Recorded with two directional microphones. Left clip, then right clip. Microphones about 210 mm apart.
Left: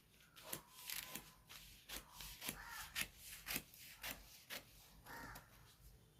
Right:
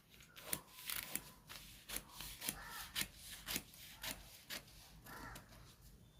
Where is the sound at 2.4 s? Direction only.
10° right (ahead or behind).